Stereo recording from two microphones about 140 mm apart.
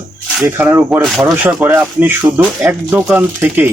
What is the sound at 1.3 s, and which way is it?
Speech, 10° right (ahead or behind).